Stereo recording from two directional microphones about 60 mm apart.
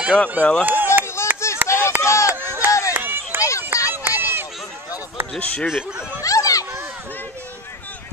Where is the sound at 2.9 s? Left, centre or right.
Right.